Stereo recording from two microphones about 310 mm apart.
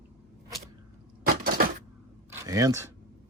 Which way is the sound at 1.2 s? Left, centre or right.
Right.